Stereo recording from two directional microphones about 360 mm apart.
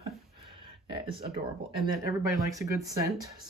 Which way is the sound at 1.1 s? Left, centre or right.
Centre.